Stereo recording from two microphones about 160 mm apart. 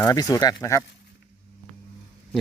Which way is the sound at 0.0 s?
20° left (ahead or behind).